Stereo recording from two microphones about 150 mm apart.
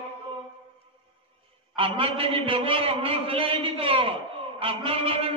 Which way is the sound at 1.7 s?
40° right (ahead or behind).